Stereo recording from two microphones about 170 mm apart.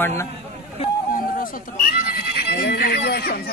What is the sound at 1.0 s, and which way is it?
Speech, 55° left (ahead or behind).